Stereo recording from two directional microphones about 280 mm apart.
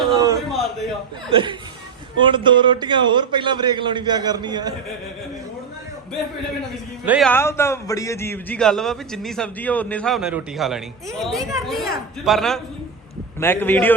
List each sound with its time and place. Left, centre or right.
0.1 s a sound: centre
1.3 s a man's voice: centre
7.0 s a man's voice: centre